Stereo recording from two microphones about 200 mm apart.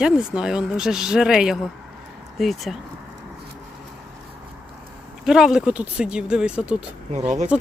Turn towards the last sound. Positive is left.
turn(degrees=-35)  # may be behind; listen again after turning